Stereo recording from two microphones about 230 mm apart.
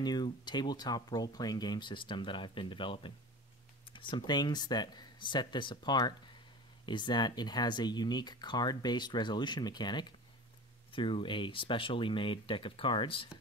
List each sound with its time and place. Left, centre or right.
0.0 s speech: centre